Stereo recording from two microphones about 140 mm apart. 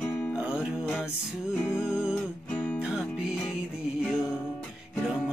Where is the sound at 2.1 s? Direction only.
10° left (ahead or behind).